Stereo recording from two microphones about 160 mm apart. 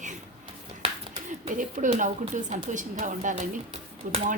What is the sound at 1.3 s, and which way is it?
A woman's voice, 50° right (ahead or behind).